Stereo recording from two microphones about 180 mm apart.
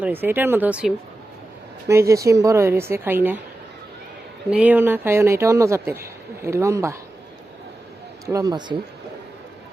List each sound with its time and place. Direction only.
0.0 s speech: 10° right (ahead or behind)
4.4 s speech: 5° right (ahead or behind)
8.3 s speech: 20° right (ahead or behind)